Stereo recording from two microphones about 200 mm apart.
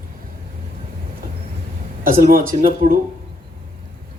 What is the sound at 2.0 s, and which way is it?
Speech, 45° right (ahead or behind).